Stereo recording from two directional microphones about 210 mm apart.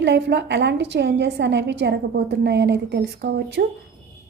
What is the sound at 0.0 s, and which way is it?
A woman's voice, 55° right (ahead or behind).